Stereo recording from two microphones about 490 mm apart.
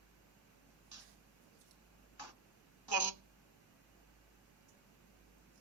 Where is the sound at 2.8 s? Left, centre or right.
Right.